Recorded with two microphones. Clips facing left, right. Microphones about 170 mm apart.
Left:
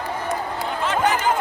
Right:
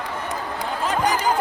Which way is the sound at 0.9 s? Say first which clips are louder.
Left 1 dB; 35° right (ahead or behind).